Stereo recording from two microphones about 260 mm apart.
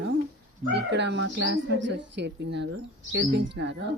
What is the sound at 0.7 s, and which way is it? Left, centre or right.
Speech, right.